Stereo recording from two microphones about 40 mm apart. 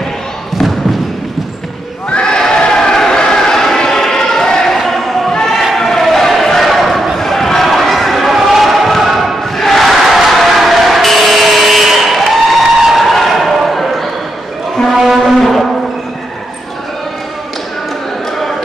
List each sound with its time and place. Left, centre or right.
2.0 s a sound: left
4.7 s a sound: centre
5.8 s crowd: centre
7.2 s basketball bounce: centre
9.6 s crowd: centre
15.0 s foghorn: centre